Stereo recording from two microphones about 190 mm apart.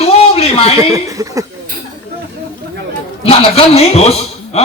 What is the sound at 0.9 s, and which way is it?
Speech, 15° right (ahead or behind).